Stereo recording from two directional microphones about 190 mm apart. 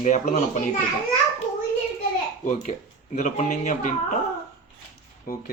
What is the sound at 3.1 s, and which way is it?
Speech, 40° left (ahead or behind).